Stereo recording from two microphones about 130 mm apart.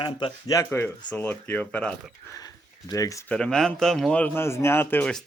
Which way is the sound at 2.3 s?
30° left (ahead or behind).